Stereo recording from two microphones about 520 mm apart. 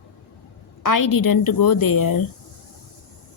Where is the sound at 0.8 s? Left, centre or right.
Left.